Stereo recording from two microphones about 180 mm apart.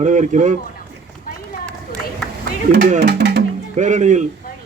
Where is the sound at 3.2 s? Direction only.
70° right (ahead or behind).